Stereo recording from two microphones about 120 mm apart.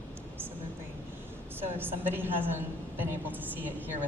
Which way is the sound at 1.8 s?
20° right (ahead or behind).